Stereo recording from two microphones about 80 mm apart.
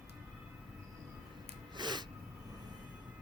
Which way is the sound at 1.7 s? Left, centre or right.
Right.